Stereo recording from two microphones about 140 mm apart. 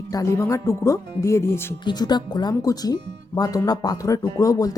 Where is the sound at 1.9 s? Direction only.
30° left (ahead or behind).